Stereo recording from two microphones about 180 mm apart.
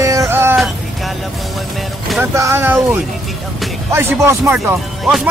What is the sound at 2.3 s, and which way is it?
Speech, 15° right (ahead or behind).